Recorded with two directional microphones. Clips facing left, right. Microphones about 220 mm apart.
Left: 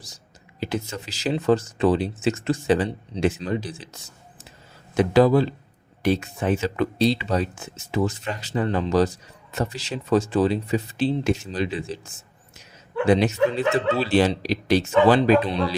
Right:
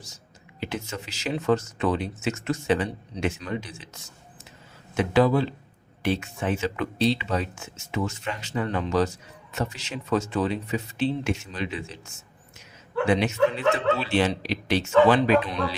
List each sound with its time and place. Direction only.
0.6 s speech: 35° left (ahead or behind)
4.9 s speech: 40° left (ahead or behind)